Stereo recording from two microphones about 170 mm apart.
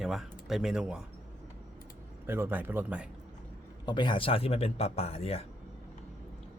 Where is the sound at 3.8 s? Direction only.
25° left (ahead or behind).